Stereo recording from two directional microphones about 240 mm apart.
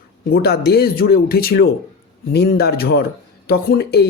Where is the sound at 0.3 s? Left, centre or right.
Left.